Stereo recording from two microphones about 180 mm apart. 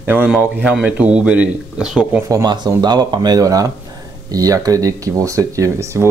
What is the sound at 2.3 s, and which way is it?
Speech, 20° right (ahead or behind).